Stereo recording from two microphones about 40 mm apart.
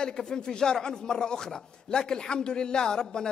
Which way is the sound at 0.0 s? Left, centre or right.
Centre.